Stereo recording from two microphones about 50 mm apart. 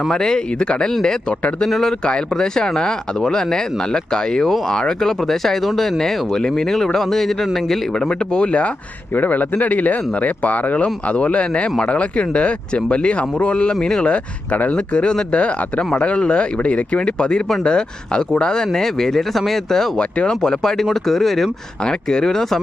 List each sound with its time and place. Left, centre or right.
0.1 s speech: centre
9.1 s speech: left; by 14.2 s centre
14.5 s speech: left
14.9 s speech: centre
20.0 s speech: centre
21.8 s speech: centre